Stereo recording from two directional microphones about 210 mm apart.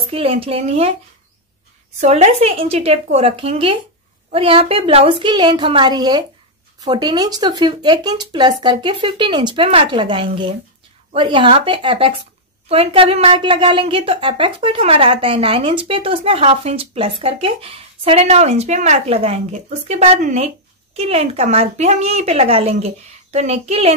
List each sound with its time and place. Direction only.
0.0 s a woman's voice: 25° right (ahead or behind)
2.0 s a woman's voice: 35° right (ahead or behind)